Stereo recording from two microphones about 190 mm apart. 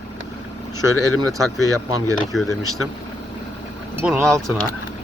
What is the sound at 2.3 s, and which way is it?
Speech, centre (ahead or behind).